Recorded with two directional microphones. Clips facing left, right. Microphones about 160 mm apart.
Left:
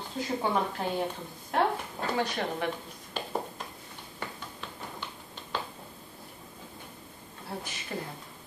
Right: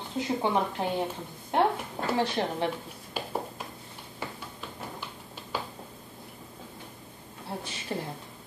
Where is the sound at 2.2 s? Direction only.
30° right (ahead or behind).